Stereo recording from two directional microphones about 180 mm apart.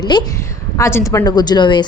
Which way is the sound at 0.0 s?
25° left (ahead or behind).